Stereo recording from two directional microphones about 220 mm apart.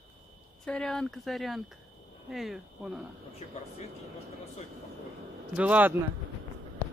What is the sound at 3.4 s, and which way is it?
Speech, 30° left (ahead or behind).